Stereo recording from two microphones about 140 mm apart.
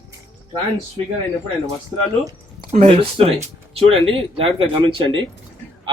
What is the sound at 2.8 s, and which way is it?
Speech, 45° right (ahead or behind).